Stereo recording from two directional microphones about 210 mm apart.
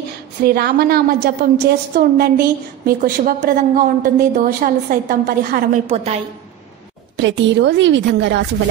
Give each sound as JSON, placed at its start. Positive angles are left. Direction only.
{"t": 0.4, "sound": "a woman's voice", "side_deg": -50}
{"t": 7.2, "sound": "a woman's voice", "side_deg": -60}